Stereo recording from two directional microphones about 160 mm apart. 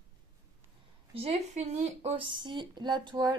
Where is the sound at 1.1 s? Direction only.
40° right (ahead or behind).